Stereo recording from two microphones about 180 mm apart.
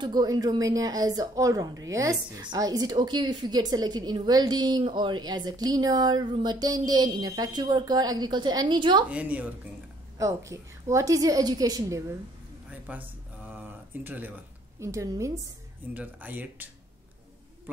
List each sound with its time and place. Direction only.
0.0 s a woman's voice: 20° right (ahead or behind)
9.1 s a woman's voice: 10° right (ahead or behind)
12.8 s a sound: 10° right (ahead or behind)
14.0 s a woman's voice: 10° right (ahead or behind)